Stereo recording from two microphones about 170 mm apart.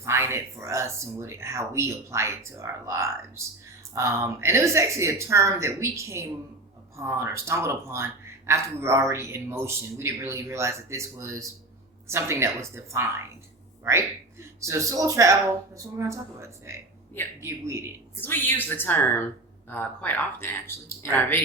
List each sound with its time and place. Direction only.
0.0 s speech: 15° right (ahead or behind)
18.2 s speech: 10° left (ahead or behind)